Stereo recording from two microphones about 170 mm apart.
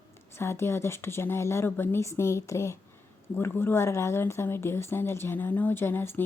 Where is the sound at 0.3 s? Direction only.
15° left (ahead or behind).